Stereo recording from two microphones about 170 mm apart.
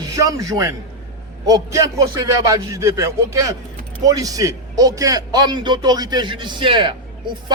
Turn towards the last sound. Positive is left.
turn(degrees=-30)  # may be behind; listen again after turning